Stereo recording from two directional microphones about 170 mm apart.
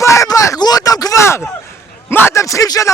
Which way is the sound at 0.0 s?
15° left (ahead or behind).